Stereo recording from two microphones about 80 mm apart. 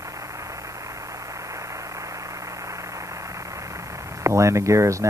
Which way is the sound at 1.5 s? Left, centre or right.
Right.